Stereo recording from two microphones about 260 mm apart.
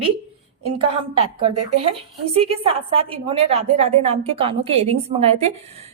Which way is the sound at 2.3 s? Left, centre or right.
Right.